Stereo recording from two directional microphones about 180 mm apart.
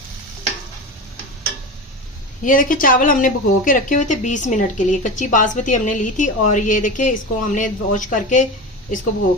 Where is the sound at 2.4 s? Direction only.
50° left (ahead or behind).